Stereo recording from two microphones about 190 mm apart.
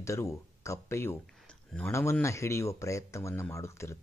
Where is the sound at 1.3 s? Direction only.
Centre (ahead or behind).